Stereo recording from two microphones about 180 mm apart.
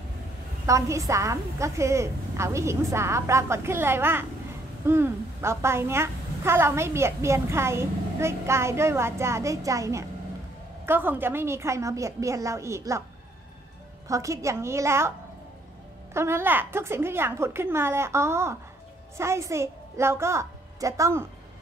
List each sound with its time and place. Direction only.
0.7 s a woman's voice: 15° right (ahead or behind)
14.0 s a woman's voice: 15° right (ahead or behind)